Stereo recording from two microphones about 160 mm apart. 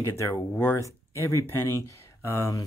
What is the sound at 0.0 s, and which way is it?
Speech, 15° left (ahead or behind).